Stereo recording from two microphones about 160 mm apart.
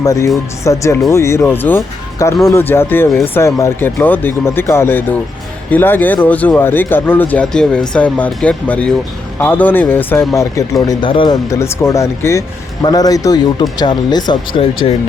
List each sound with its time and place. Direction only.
0.0 s speech: 20° left (ahead or behind)
10.8 s speech: 30° left (ahead or behind)
11.5 s speech: 15° left (ahead or behind); by 14.9 s 35° left (ahead or behind)